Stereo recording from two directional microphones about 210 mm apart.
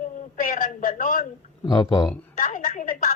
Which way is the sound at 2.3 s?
40° left (ahead or behind).